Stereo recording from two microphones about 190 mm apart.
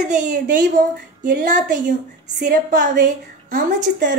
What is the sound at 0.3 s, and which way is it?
A woman's voice, 45° right (ahead or behind).